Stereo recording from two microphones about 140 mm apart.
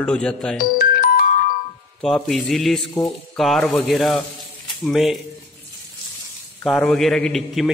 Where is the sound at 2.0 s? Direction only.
Centre (ahead or behind).